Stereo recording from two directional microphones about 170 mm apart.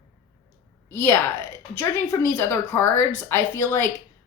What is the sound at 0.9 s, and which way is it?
A woman's voice, 15° left (ahead or behind).